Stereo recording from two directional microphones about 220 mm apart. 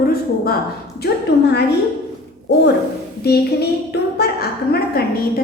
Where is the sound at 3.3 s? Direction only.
45° left (ahead or behind).